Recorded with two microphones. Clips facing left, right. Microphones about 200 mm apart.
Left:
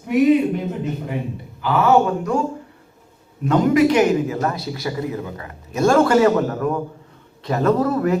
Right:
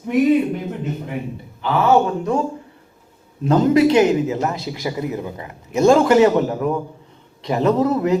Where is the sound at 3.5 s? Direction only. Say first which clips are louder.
Right 1 dB; 30° right (ahead or behind).